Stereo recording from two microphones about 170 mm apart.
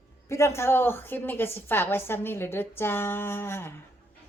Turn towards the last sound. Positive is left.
turn(degrees=15)  # may be behind; listen again after turning